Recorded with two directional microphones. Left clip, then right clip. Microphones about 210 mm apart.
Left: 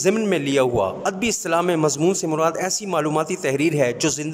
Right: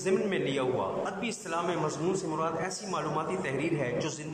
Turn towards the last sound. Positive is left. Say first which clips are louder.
# left 11 dB
turn(degrees=55)  # may be behind; listen again after turning